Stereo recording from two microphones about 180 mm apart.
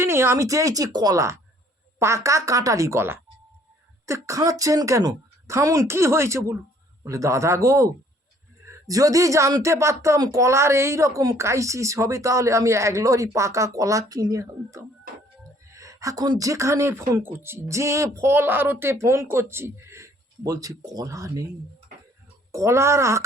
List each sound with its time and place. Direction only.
0.0 s a woman's voice: 15° right (ahead or behind)
22.5 s a woman's voice: 15° right (ahead or behind)